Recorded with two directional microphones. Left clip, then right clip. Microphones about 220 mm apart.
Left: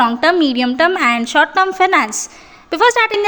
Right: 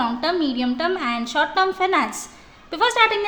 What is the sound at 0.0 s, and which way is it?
A woman's voice, 30° left (ahead or behind).